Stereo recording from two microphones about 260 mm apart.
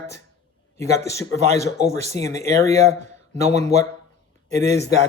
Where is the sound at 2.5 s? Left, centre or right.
Centre.